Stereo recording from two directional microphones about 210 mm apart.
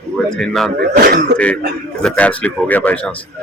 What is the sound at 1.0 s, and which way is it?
Speech, 45° right (ahead or behind).